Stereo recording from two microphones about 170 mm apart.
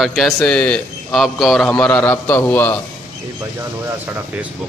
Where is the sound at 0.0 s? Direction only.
Centre (ahead or behind).